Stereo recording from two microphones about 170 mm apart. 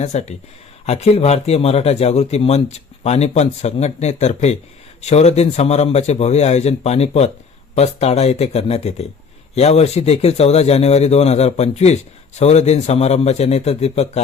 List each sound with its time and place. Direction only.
0.0 s speech: 40° left (ahead or behind)